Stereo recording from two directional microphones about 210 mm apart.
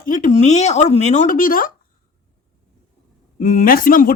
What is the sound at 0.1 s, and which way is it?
Speech, 35° left (ahead or behind).